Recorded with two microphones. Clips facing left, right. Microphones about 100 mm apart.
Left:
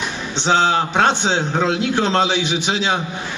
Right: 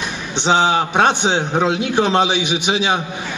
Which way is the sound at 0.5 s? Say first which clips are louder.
Right 1 dB; 15° right (ahead or behind).